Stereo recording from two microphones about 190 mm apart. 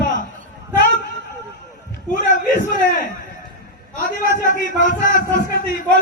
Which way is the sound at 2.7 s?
45° left (ahead or behind).